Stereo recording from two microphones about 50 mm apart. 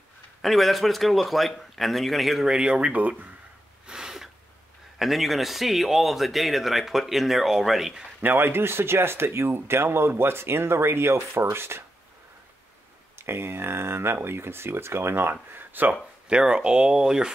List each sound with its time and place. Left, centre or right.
0.4 s speech: centre
2.4 s speech: centre
3.8 s a sound: centre
4.9 s speech: centre
8.2 s speech: right
13.2 s speech: right
15.5 s speech: right
16.3 s speech: centre